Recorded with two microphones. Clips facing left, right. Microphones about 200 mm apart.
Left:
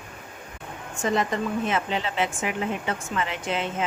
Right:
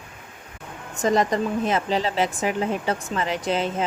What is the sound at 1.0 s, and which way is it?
A woman's voice, 40° right (ahead or behind).